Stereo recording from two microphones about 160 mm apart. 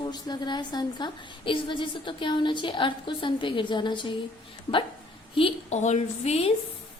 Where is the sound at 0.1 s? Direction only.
25° left (ahead or behind).